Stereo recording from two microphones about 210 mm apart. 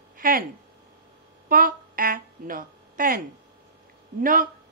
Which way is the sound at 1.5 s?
45° right (ahead or behind).